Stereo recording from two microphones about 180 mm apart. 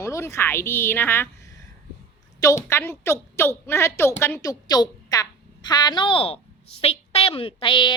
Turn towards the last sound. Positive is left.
turn(degrees=30)  # may be behind; listen again after turning